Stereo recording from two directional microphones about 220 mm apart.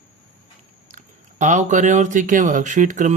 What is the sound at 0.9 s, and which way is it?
Speech, 35° right (ahead or behind).